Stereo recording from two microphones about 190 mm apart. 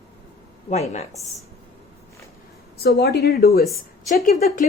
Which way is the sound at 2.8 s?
55° left (ahead or behind).